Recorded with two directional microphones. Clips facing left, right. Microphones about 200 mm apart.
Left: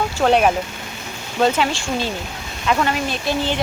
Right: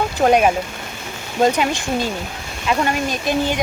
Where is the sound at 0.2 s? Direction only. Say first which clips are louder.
Right 1 dB; 10° right (ahead or behind).